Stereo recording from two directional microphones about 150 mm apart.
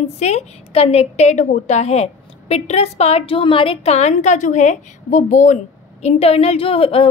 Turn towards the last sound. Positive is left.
turn(degrees=40)  # may be behind; listen again after turning